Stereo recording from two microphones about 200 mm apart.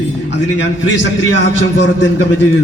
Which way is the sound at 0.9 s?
65° left (ahead or behind).